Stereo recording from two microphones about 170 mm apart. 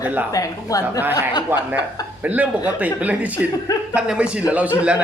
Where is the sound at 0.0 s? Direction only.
10° right (ahead or behind).